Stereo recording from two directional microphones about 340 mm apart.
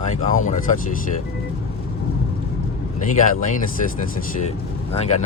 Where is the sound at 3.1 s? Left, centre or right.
Left.